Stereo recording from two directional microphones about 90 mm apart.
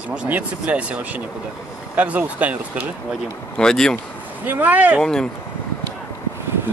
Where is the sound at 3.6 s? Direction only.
5° left (ahead or behind).